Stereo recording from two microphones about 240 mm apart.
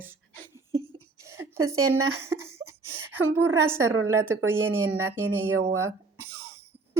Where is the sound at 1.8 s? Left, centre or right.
Right.